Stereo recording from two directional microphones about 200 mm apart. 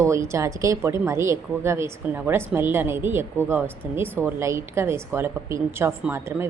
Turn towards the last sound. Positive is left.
turn(degrees=-15)  # may be behind; listen again after turning